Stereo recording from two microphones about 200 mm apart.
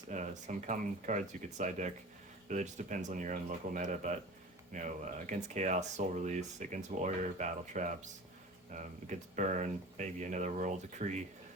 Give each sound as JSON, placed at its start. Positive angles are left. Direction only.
{"t": 0.1, "sound": "speech", "side_deg": -35}